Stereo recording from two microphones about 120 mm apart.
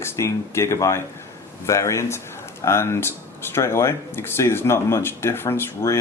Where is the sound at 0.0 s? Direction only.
20° left (ahead or behind).